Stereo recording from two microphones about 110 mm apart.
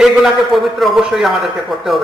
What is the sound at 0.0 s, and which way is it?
A man's voice, 5° right (ahead or behind).